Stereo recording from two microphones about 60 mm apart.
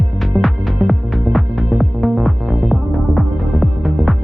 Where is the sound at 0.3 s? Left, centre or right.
Centre.